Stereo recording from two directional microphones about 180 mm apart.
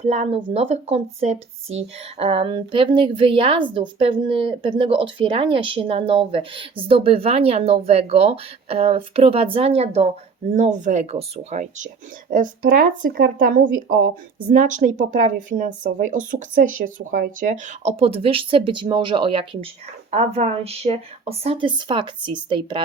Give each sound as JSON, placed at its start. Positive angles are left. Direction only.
{"t": 0.1, "sound": "speech", "side_deg": -35}